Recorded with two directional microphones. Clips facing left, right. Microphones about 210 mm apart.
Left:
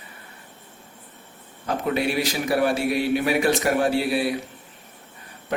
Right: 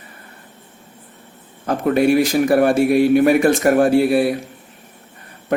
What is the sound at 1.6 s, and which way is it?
A man's voice, 50° right (ahead or behind).